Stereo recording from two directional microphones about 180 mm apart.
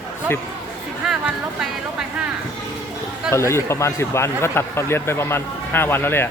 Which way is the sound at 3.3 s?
15° left (ahead or behind).